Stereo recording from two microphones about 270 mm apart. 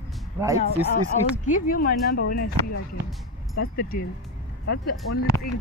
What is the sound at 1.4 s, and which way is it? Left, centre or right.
Speech, left.